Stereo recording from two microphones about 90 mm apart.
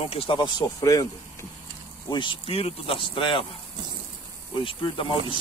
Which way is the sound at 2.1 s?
65° left (ahead or behind).